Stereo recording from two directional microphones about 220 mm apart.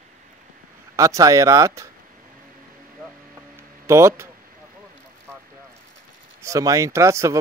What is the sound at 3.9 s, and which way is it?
Speech, 10° right (ahead or behind).